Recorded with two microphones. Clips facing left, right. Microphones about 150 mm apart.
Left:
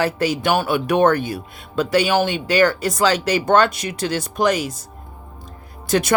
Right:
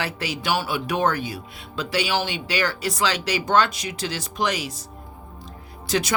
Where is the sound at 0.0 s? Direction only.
45° left (ahead or behind).